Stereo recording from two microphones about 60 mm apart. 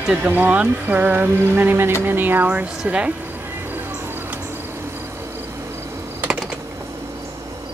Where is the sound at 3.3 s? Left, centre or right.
Right.